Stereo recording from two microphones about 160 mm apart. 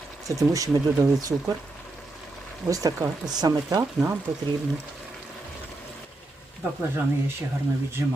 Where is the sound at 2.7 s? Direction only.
20° right (ahead or behind).